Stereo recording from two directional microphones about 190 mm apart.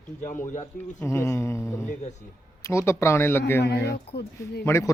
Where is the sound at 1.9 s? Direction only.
40° left (ahead or behind).